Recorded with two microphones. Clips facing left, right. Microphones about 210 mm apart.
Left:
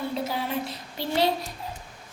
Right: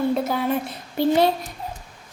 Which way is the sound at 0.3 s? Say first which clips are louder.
Right 7 dB; 50° right (ahead or behind).